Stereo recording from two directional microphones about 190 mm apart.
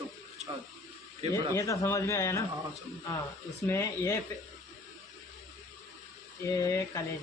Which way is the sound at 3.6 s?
15° left (ahead or behind).